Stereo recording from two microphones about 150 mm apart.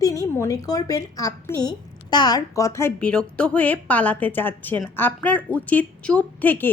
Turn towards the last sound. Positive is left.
turn(degrees=10)  # may be behind; listen again after turning